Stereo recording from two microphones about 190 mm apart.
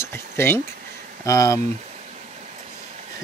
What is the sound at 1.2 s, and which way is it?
Speech, 15° left (ahead or behind).